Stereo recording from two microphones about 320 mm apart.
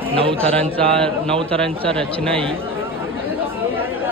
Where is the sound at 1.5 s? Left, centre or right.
Centre.